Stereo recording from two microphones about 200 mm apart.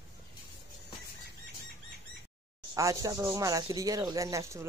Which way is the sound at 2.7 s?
15° right (ahead or behind).